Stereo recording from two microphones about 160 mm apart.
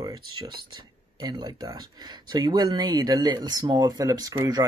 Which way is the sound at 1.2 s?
25° right (ahead or behind).